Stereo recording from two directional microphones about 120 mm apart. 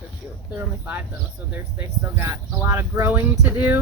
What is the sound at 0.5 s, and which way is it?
Speech, 15° right (ahead or behind).